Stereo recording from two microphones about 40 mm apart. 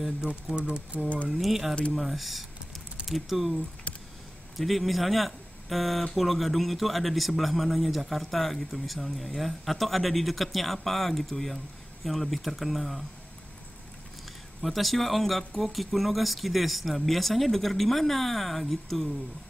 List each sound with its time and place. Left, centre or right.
0.2 s speech: right
1.0 s speech: left
1.3 s a man's voice: centre
14.6 s a man's voice: centre